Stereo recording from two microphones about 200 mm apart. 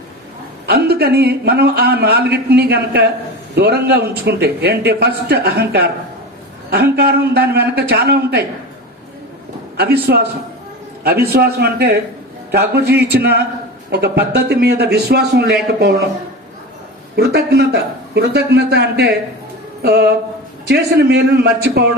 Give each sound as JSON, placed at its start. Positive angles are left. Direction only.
{"t": 0.7, "sound": "a man's voice", "side_deg": -50}
{"t": 9.7, "sound": "a man's voice", "side_deg": -55}
{"t": 17.3, "sound": "a man's voice", "side_deg": -55}